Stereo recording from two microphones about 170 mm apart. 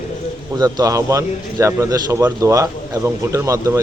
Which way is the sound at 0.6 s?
20° right (ahead or behind).